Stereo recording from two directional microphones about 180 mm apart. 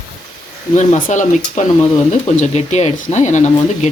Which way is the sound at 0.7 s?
40° left (ahead or behind).